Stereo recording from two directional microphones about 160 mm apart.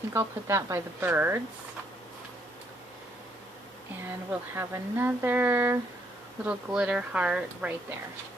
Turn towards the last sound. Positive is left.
turn(degrees=-5)  # may be behind; listen again after turning